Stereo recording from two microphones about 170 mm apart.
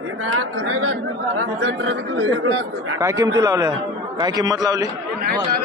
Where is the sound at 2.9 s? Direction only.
20° right (ahead or behind).